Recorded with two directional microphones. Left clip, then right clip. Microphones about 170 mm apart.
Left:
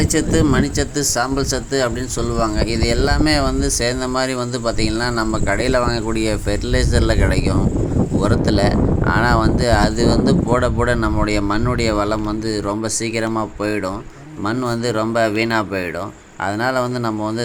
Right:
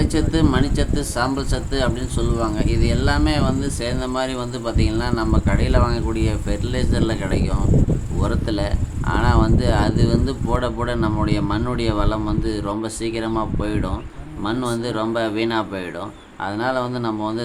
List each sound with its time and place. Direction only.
0.0 s speech: 20° left (ahead or behind)